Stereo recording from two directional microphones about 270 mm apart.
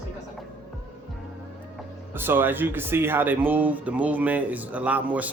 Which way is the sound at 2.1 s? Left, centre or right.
Centre.